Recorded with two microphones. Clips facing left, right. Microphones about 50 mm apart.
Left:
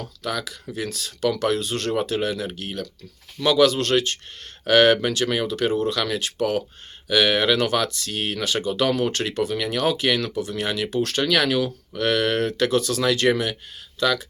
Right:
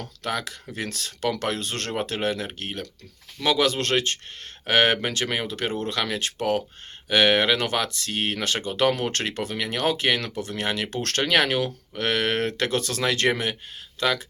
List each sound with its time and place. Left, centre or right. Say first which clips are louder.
0.3 s speech: left 1 dB; right
2.0 s speech: right 1 dB; right
9.3 s speech: left 4 dB; right
10.9 s speech: left 5 dB; right
11.2 s speech: even; right